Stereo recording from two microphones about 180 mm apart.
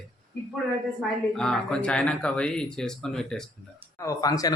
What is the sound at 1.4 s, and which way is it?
Speech, 5° left (ahead or behind).